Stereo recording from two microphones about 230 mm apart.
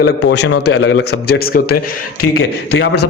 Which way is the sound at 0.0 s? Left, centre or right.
Left.